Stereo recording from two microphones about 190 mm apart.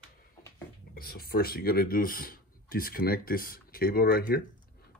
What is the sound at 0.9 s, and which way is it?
Speech, 55° left (ahead or behind).